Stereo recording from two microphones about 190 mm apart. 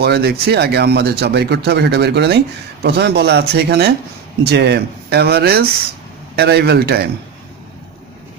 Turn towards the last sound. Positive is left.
turn(degrees=-55)  # may be behind; listen again after turning